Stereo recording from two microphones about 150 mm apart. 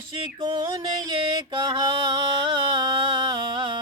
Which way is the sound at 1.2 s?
30° right (ahead or behind).